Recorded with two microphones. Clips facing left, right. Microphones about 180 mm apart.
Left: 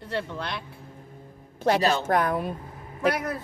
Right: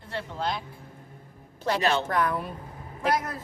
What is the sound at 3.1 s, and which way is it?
Speech, 65° left (ahead or behind).